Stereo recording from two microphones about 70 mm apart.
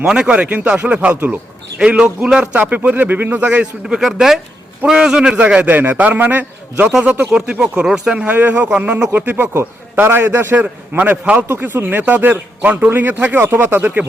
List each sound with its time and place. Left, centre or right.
0.0 s speech: centre
2.6 s speech: right